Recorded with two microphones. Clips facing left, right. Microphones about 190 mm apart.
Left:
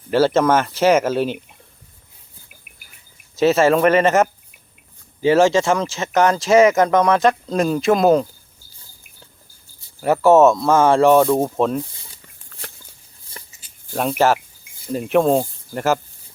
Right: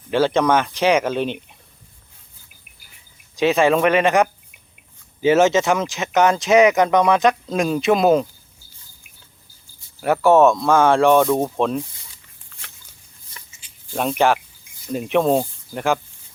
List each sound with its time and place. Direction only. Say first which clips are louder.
0.1 s speech: left 2 dB; 5° left (ahead or behind)
3.5 s speech: left 1 dB; centre (ahead or behind)
5.2 s speech: left 1 dB; 20° right (ahead or behind)
5.6 s speech: left 1 dB; centre (ahead or behind)
10.0 s speech: left 2 dB; centre (ahead or behind)
12.1 s a sound: left 4 dB; 40° left (ahead or behind)
13.9 s speech: left 1 dB; 5° left (ahead or behind)